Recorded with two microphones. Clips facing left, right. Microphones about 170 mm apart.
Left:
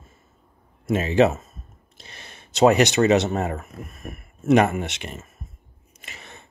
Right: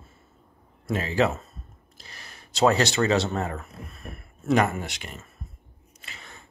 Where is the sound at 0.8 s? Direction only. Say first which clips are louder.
Left 6 dB; 20° left (ahead or behind).